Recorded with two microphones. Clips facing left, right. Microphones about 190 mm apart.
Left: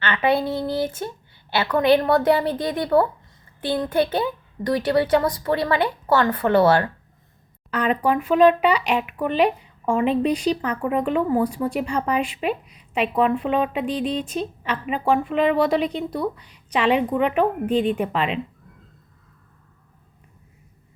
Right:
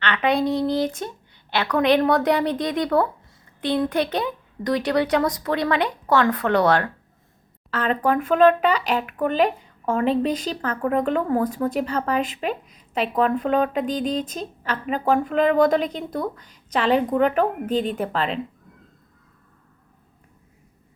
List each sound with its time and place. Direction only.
0.0 s speech: 5° left (ahead or behind)
10.0 s speech: 35° right (ahead or behind)
10.3 s speech: 10° left (ahead or behind)
13.8 s speech: 35° right (ahead or behind)
14.3 s a woman's voice: 10° left (ahead or behind)
17.7 s speech: 35° right (ahead or behind)
17.9 s speech: 10° left (ahead or behind)